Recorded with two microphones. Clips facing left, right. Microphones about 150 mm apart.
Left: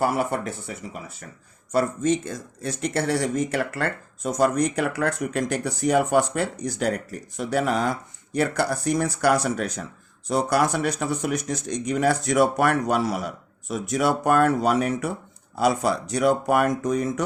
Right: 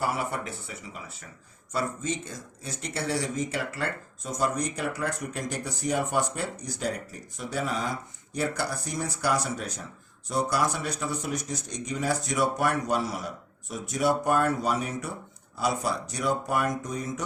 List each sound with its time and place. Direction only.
0.0 s speech: 50° left (ahead or behind)
1.7 s speech: 55° left (ahead or behind)